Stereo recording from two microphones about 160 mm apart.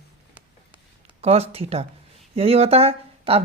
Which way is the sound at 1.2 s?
40° right (ahead or behind).